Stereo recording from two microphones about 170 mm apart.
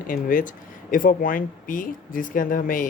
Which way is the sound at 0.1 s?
55° left (ahead or behind).